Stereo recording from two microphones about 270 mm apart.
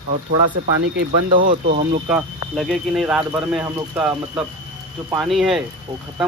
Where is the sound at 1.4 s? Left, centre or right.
Right.